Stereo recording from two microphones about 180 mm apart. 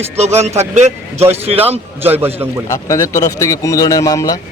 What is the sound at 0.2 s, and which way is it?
Speech, 35° right (ahead or behind).